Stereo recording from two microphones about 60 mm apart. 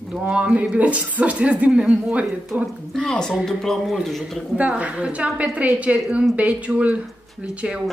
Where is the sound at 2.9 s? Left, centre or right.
Centre.